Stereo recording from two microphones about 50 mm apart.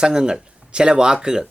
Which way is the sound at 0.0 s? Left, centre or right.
Centre.